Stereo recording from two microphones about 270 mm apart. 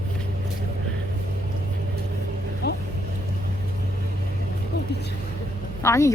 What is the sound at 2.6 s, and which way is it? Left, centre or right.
Vehicle, left.